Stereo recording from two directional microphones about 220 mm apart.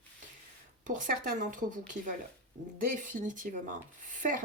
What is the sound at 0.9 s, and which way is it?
Speech, 35° right (ahead or behind).